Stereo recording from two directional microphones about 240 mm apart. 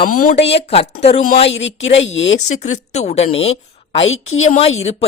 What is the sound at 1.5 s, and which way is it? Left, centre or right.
Speech, left.